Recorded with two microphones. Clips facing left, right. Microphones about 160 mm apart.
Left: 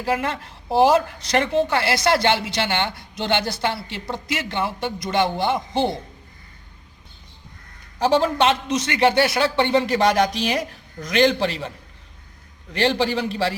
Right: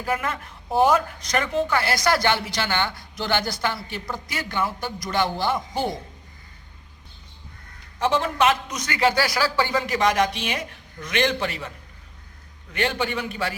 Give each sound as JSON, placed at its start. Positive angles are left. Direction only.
{"t": 0.0, "sound": "a woman's voice", "side_deg": 30}
{"t": 7.9, "sound": "a man's voice", "side_deg": 35}
{"t": 12.7, "sound": "a man's voice", "side_deg": 30}